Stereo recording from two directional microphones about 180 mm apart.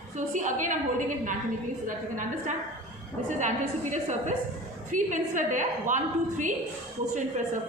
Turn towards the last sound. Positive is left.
turn(degrees=-45)  # may be behind; listen again after turning